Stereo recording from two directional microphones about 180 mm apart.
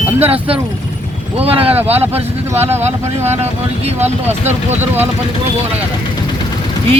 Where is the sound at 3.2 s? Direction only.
35° right (ahead or behind).